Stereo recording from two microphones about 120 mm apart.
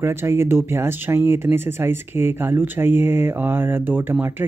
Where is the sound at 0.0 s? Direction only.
20° right (ahead or behind).